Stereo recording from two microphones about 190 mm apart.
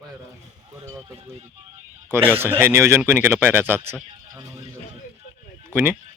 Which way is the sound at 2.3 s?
10° right (ahead or behind).